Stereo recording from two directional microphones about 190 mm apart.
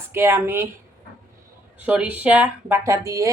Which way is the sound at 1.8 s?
5° right (ahead or behind).